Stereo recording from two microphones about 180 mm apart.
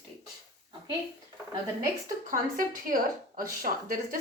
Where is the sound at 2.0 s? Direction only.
50° right (ahead or behind).